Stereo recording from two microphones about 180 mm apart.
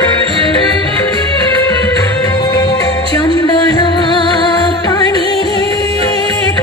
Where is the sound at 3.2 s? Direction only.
25° left (ahead or behind).